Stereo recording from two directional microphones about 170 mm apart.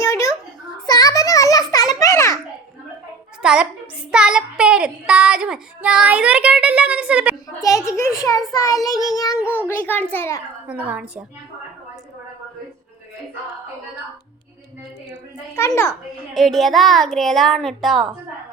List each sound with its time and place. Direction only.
0.0 s a sound: 20° left (ahead or behind)
3.4 s a child's voice: 5° right (ahead or behind)
4.1 s child singing: 5° right (ahead or behind)
7.9 s a child's voice: 15° left (ahead or behind)
8.5 s child singing: 20° left (ahead or behind)
9.6 s a child's voice: 10° left (ahead or behind)
10.7 s child singing: 10° right (ahead or behind)
15.5 s a child's voice: 15° left (ahead or behind)
15.9 s a child's voice: centre (ahead or behind)